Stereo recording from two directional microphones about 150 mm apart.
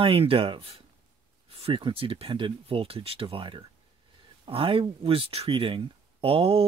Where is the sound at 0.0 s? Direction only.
35° right (ahead or behind).